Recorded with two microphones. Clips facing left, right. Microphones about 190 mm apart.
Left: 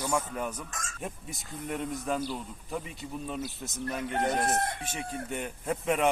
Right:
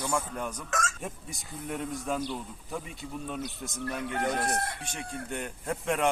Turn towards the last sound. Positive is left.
turn(degrees=5)  # may be behind; listen again after turning